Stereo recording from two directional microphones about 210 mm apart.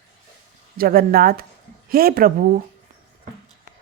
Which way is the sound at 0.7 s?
45° right (ahead or behind).